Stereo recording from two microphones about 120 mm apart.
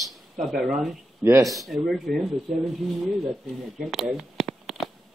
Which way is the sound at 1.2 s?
20° right (ahead or behind).